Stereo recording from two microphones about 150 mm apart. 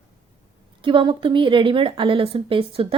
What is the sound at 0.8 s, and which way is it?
A woman's voice, 35° right (ahead or behind).